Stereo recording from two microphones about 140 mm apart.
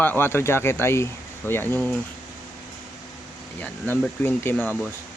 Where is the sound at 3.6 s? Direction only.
15° left (ahead or behind).